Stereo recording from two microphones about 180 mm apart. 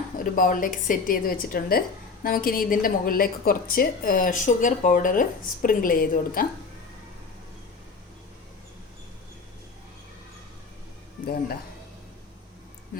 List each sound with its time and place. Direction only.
0.2 s a woman's voice: 50° left (ahead or behind)